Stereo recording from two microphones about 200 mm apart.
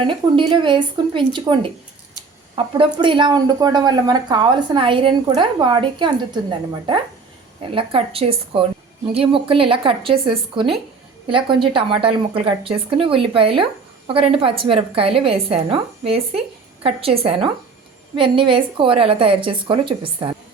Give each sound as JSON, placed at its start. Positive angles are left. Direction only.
{"t": 0.0, "sound": "speech", "side_deg": -25}
{"t": 2.7, "sound": "speech", "side_deg": -25}
{"t": 7.6, "sound": "speech", "side_deg": -25}